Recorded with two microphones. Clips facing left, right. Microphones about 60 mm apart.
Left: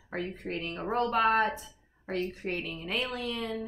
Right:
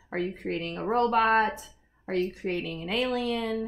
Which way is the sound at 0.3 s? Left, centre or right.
Right.